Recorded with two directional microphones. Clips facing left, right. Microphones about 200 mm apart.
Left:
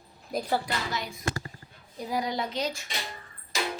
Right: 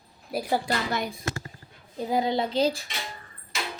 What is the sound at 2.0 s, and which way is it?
Speech, 25° right (ahead or behind).